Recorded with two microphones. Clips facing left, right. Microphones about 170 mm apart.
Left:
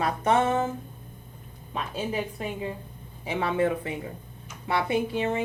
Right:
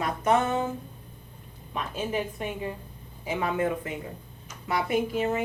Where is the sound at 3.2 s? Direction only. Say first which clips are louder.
Left 1 dB; 30° left (ahead or behind).